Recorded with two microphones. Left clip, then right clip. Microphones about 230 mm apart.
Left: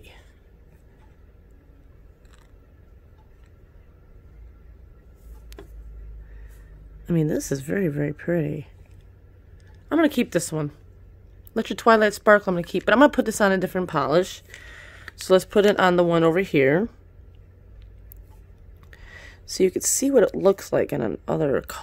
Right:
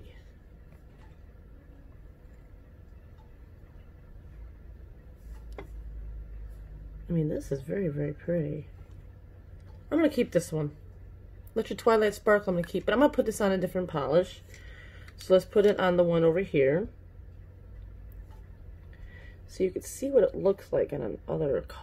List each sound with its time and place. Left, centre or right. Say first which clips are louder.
7.1 s speech: left 7 dB; left
9.8 s speech: left 5 dB; left
19.4 s speech: left 9 dB; left